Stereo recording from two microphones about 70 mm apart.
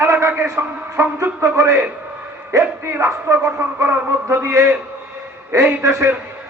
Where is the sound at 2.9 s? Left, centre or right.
Right.